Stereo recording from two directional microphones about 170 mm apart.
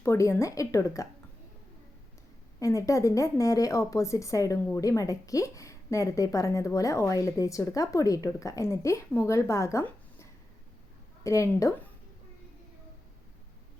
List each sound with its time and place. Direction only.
0.0 s a woman's voice: 15° left (ahead or behind)
2.6 s speech: 20° left (ahead or behind)